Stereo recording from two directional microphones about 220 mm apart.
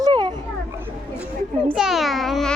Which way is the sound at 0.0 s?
20° right (ahead or behind).